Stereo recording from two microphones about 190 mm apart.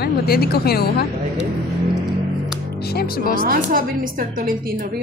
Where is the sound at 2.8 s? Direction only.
55° left (ahead or behind).